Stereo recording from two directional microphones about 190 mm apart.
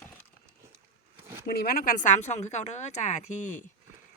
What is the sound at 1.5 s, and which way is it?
A woman's voice, 50° left (ahead or behind).